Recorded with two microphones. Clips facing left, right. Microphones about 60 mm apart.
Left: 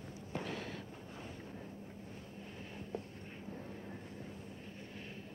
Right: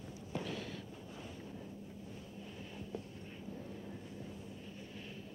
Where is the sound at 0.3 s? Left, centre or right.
Left.